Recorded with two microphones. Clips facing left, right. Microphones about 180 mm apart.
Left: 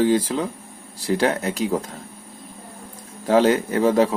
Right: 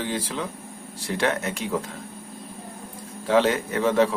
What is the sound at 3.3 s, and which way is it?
Speech, 40° left (ahead or behind).